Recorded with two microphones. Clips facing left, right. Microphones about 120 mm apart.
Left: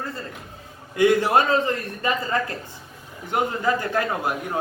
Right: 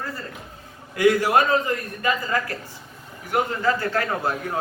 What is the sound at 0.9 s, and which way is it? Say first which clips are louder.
A man's voice: even; 25° left (ahead or behind).